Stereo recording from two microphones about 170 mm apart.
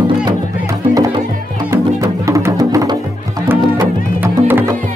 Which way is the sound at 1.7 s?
15° right (ahead or behind).